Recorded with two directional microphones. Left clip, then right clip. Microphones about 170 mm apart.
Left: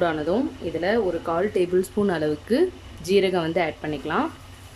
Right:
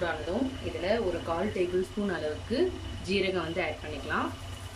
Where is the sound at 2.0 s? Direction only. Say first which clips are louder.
Left 9 dB; 40° left (ahead or behind).